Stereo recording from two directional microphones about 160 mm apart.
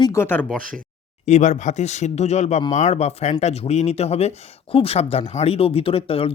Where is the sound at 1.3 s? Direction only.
45° left (ahead or behind).